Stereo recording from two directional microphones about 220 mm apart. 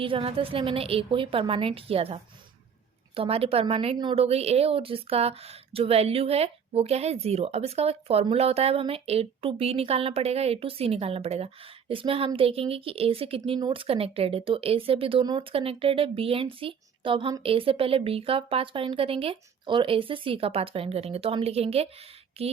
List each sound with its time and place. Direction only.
0.0 s a woman's voice: 25° right (ahead or behind)